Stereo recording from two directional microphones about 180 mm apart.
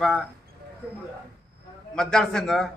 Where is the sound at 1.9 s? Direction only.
5° left (ahead or behind).